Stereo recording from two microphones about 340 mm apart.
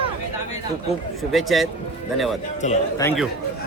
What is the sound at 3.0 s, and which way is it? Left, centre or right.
Speech, centre.